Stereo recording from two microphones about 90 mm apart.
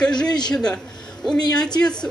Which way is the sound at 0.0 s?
10° left (ahead or behind).